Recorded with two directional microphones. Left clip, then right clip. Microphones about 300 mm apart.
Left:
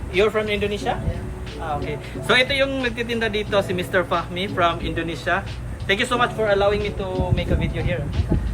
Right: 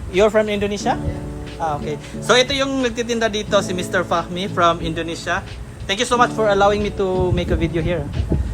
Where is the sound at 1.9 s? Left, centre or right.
Centre.